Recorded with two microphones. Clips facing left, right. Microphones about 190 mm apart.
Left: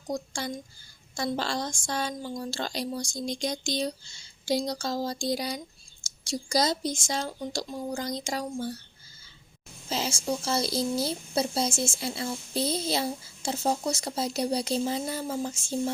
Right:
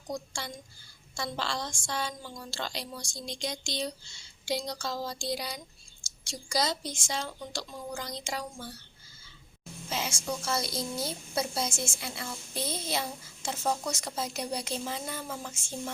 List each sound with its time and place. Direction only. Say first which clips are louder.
0.1 s speech: left 5 dB; 40° left (ahead or behind)
9.9 s speech: left 4 dB; 30° left (ahead or behind)